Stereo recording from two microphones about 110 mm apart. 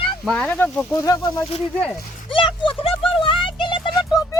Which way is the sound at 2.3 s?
50° left (ahead or behind).